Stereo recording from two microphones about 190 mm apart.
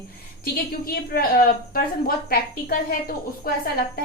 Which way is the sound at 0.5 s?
55° left (ahead or behind).